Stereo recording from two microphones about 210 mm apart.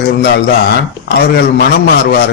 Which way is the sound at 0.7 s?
50° left (ahead or behind).